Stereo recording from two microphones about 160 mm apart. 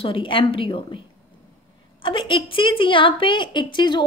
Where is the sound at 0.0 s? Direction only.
35° left (ahead or behind).